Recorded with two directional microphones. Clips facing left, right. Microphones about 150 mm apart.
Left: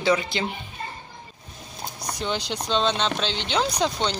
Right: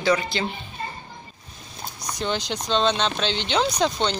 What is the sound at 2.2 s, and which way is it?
Speech, 10° left (ahead or behind).